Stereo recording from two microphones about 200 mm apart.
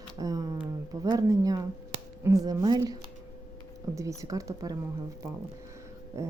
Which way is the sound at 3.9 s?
15° right (ahead or behind).